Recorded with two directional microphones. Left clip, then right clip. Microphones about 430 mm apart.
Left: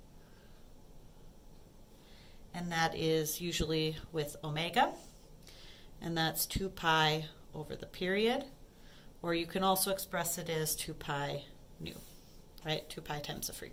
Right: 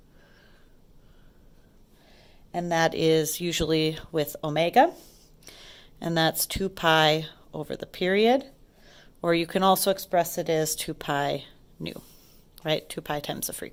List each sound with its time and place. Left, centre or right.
2.5 s speech: centre
12.6 s speech: centre